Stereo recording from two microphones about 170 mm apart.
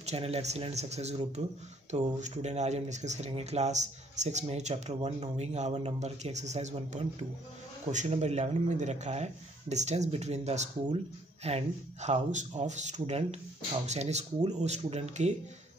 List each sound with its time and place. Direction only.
0.0 s speech: 35° right (ahead or behind)